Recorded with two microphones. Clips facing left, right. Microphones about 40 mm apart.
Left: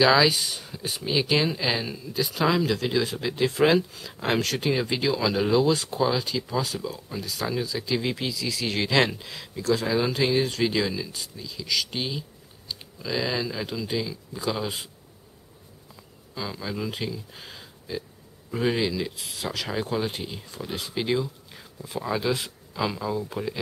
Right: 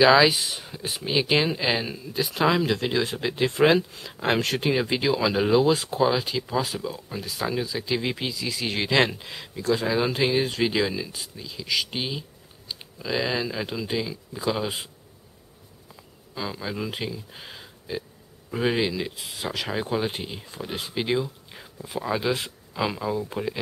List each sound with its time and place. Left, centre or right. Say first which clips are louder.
0.0 s speech: right 2 dB; centre
16.3 s speech: right 1 dB; centre